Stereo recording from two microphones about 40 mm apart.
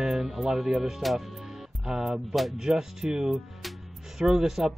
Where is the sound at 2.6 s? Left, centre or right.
Centre.